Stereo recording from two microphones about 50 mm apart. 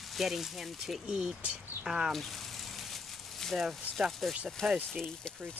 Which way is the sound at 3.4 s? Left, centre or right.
Centre.